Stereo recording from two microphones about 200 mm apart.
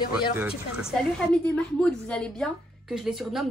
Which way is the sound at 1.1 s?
5° left (ahead or behind).